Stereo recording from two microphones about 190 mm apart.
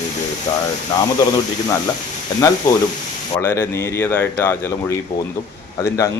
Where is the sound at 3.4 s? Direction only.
10° left (ahead or behind).